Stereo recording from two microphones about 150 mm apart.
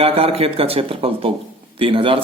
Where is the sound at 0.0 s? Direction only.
40° right (ahead or behind).